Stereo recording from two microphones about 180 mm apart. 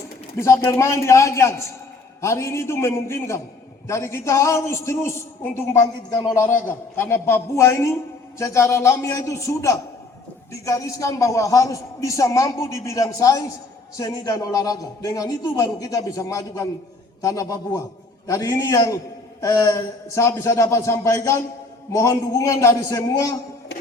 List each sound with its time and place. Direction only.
0.3 s a man's voice: 15° left (ahead or behind)